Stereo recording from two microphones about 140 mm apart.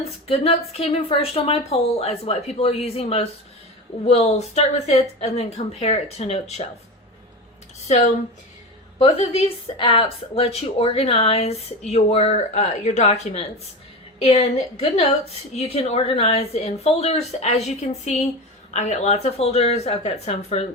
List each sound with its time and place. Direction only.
0.3 s a woman's voice: 45° left (ahead or behind)
9.0 s a woman's voice: 45° left (ahead or behind)
15.5 s a woman's voice: 45° left (ahead or behind)